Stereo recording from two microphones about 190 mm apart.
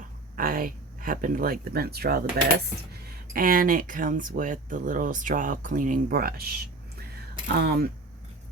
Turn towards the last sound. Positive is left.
turn(degrees=-55)  # may be behind; listen again after turning